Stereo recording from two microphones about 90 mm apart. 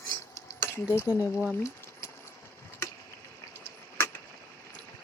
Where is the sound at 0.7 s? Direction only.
30° left (ahead or behind).